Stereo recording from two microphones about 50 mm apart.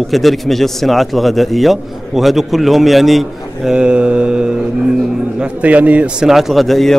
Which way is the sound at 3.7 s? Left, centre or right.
Centre.